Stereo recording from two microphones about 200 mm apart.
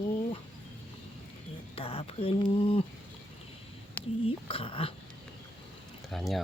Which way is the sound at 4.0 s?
10° left (ahead or behind).